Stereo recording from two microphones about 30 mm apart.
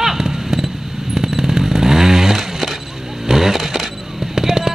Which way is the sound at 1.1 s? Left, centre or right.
Centre.